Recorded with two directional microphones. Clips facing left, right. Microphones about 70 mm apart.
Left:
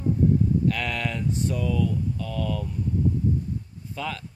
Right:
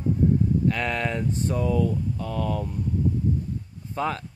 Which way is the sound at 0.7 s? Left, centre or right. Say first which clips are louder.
Right 2 dB; right.